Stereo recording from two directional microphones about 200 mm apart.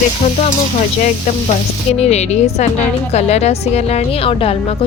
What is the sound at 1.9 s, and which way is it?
Speech, 35° left (ahead or behind).